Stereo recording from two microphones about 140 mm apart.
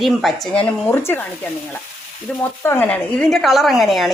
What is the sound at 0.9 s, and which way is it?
Speech, 15° left (ahead or behind).